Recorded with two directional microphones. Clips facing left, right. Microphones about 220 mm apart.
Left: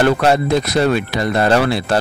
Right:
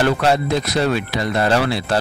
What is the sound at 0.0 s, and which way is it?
Speech, 55° left (ahead or behind).